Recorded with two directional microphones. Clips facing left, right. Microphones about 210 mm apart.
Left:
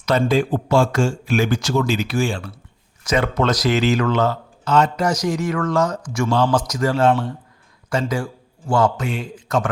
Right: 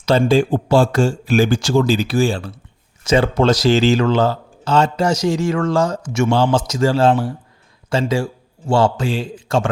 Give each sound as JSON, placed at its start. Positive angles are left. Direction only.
{"t": 0.0, "sound": "a man's voice", "side_deg": -30}